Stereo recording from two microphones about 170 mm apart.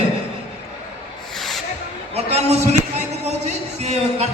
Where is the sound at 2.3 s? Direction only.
40° right (ahead or behind).